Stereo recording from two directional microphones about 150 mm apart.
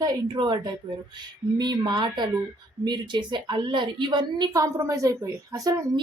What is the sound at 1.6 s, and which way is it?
A woman's voice, 30° right (ahead or behind).